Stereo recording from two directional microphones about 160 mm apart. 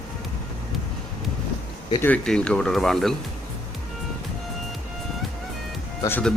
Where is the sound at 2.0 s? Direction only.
10° left (ahead or behind).